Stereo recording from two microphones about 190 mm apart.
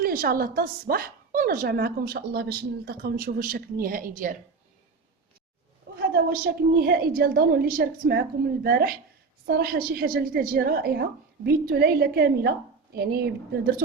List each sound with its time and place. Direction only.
0.0 s a woman's voice: 50° right (ahead or behind)
6.1 s a woman's voice: 50° right (ahead or behind)